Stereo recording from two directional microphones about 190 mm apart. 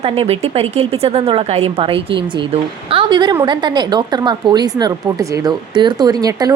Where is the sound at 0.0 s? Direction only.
30° right (ahead or behind).